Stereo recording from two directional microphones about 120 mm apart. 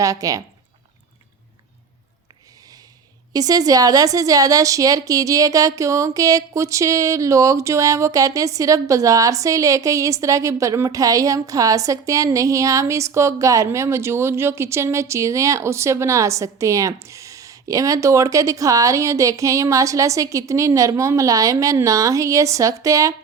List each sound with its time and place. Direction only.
0.0 s a woman's voice: 30° right (ahead or behind)
3.3 s a woman's voice: 30° right (ahead or behind)